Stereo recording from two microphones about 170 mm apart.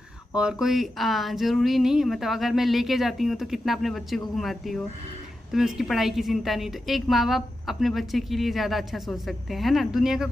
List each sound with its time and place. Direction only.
0.4 s a woman's voice: 5° right (ahead or behind)